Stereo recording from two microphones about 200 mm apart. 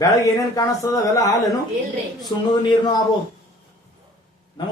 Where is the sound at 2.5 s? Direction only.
25° left (ahead or behind).